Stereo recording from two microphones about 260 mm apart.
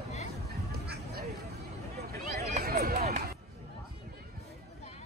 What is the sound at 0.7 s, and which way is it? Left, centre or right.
Duck, right.